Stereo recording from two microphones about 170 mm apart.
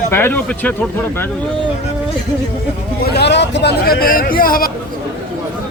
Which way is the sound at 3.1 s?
80° left.